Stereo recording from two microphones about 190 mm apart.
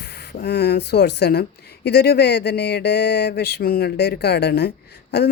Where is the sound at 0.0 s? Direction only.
55° left (ahead or behind).